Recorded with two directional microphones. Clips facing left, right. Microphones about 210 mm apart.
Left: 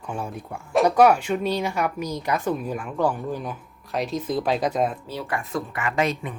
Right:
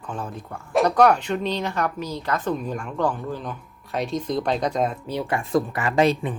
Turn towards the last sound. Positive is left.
turn(degrees=-30)  # may be behind; listen again after turning